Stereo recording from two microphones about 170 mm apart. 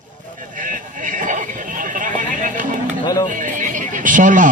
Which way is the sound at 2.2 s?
50° right (ahead or behind).